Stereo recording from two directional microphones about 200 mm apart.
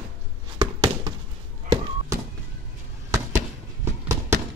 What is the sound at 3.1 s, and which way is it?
Fireworks, 15° right (ahead or behind).